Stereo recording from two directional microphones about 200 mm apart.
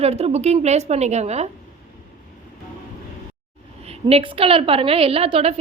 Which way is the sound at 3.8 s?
30° right (ahead or behind).